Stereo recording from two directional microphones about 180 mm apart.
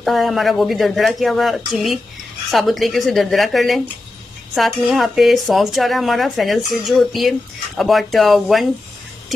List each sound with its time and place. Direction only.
0.0 s speech: centre (ahead or behind)